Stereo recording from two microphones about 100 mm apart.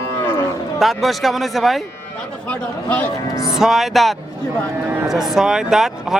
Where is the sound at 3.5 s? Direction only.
5° right (ahead or behind).